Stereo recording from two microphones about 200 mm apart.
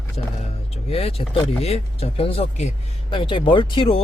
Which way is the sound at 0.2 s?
30° left (ahead or behind).